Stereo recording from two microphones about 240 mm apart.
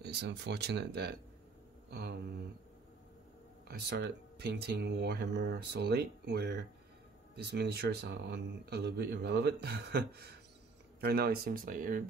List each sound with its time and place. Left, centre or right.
0.0 s speech: right
3.6 s speech: right